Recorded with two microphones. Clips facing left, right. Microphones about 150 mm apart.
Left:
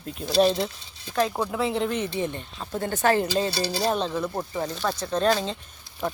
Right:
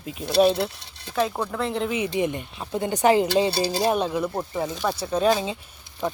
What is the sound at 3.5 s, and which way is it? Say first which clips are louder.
Speech: right 3 dB; 50° right (ahead or behind).